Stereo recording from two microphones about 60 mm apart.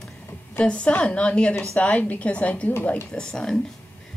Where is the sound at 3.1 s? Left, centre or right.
Centre.